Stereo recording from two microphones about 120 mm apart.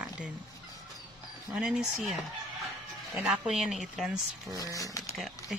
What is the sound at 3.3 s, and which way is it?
Speech, 5° right (ahead or behind).